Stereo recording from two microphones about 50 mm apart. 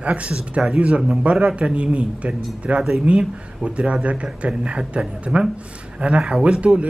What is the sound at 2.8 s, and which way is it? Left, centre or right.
Speech, centre.